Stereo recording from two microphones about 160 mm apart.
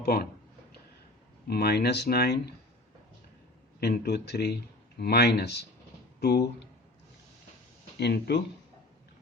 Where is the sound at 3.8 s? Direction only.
90° left.